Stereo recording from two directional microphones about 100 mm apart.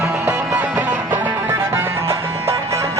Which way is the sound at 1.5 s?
25° right (ahead or behind).